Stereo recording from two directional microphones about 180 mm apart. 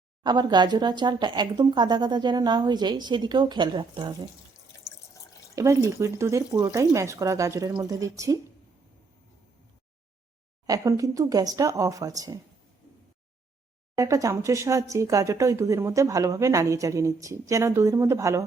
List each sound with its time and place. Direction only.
0.2 s speech: 25° right (ahead or behind)
5.5 s speech: 15° right (ahead or behind)
10.7 s speech: 20° right (ahead or behind)
13.9 s speech: 20° right (ahead or behind)